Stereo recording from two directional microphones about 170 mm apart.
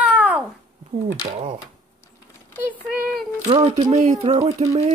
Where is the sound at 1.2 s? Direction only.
40° right (ahead or behind).